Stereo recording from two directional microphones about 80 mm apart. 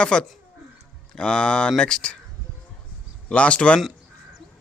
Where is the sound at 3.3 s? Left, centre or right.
Centre.